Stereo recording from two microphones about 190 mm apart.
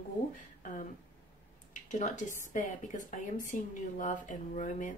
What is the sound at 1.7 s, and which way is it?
Speech, 40° left (ahead or behind).